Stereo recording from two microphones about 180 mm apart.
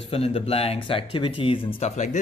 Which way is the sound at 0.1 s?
35° left (ahead or behind).